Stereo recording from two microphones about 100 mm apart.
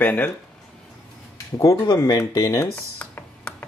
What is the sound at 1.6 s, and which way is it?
Speech, 35° left (ahead or behind).